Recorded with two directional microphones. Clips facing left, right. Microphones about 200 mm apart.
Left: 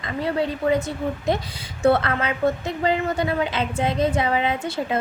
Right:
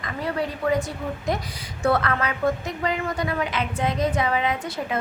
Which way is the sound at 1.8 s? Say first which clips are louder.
Left 3 dB; 25° left (ahead or behind).